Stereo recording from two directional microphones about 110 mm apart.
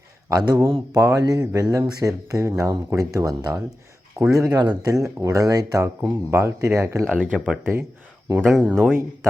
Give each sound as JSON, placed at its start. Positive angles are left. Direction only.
{"t": 0.3, "sound": "speech", "side_deg": -35}
{"t": 7.1, "sound": "speech", "side_deg": -10}
{"t": 7.6, "sound": "speech", "side_deg": -20}
{"t": 8.4, "sound": "speech", "side_deg": 0}
{"t": 8.6, "sound": "speech", "side_deg": -10}